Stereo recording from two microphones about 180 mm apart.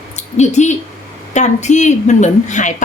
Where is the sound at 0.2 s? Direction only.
40° left (ahead or behind).